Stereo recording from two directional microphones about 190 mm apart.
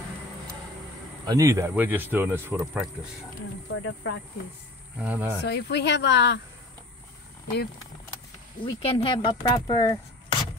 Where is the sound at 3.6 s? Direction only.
85° left.